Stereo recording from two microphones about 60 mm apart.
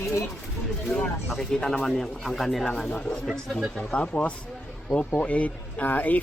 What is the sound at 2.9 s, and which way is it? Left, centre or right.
Speech, left.